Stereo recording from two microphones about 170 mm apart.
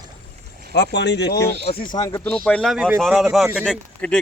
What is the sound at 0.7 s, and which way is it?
Speech, 80° left.